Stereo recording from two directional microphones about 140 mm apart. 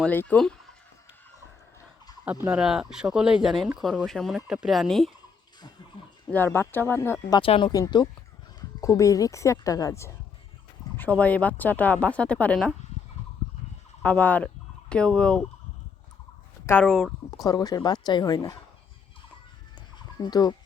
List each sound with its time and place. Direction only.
0.0 s speech: 10° left (ahead or behind)
2.2 s speech: 10° right (ahead or behind)
6.3 s a woman's voice: 15° left (ahead or behind)
7.3 s a woman's voice: 40° left (ahead or behind); by 10.1 s 25° left (ahead or behind)
10.9 s a woman's voice: 10° left (ahead or behind)
14.0 s fowl: 10° left (ahead or behind)
16.8 s speech: 5° left (ahead or behind)
17.4 s a woman's voice: 25° left (ahead or behind)
20.2 s a woman's voice: 30° left (ahead or behind)